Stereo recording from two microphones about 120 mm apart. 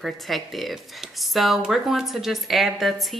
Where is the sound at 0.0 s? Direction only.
Centre (ahead or behind).